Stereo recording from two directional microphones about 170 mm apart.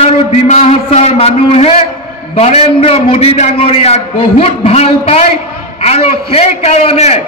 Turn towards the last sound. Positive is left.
turn(degrees=35)  # may be behind; listen again after turning